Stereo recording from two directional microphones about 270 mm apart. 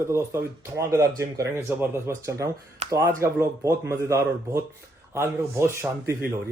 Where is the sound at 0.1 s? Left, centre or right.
Centre.